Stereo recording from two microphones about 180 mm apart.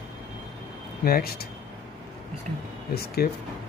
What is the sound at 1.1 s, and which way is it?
Speech, 55° left (ahead or behind).